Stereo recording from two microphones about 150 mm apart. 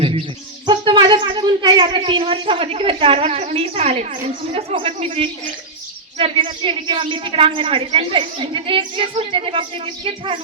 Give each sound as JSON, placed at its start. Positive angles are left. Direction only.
{"t": 0.6, "sound": "a man's voice", "side_deg": -30}